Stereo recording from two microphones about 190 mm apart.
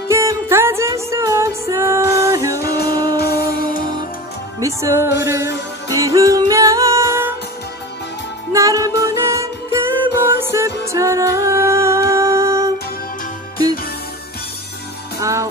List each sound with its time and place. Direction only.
0.1 s music: 15° right (ahead or behind)
3.2 s music: 55° left (ahead or behind)
4.6 s music: 15° right (ahead or behind)
8.5 s music: 15° right (ahead or behind)
15.1 s music: 15° right (ahead or behind)